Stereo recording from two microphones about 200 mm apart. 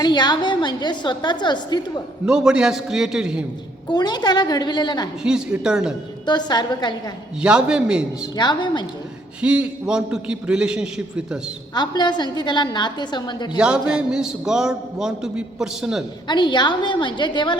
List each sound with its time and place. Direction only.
0.0 s a woman's voice: 20° left (ahead or behind)
2.2 s a man's voice: 5° right (ahead or behind)
3.8 s a woman's voice: 20° left (ahead or behind)
5.2 s a man's voice: 5° right (ahead or behind)
6.2 s a woman's voice: 20° left (ahead or behind)
7.4 s a man's voice: 5° right (ahead or behind)
8.4 s a woman's voice: 20° left (ahead or behind)
9.4 s a man's voice: 5° right (ahead or behind)
11.7 s a woman's voice: 20° left (ahead or behind)
13.6 s a man's voice: 5° right (ahead or behind)
16.2 s a woman's voice: 20° left (ahead or behind)